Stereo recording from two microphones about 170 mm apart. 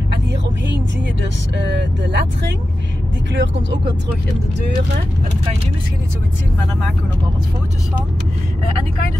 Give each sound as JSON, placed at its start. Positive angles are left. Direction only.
{"t": 1.7, "sound": "speech", "side_deg": -90}